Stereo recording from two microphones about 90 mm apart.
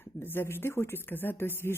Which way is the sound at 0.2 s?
25° left (ahead or behind).